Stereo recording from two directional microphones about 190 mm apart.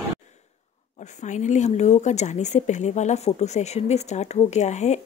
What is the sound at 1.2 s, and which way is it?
Speech, 40° left (ahead or behind).